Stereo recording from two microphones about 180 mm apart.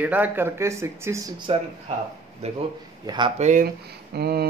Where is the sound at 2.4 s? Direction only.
35° right (ahead or behind).